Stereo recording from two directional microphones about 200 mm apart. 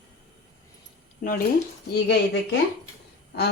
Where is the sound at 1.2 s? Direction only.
40° left (ahead or behind).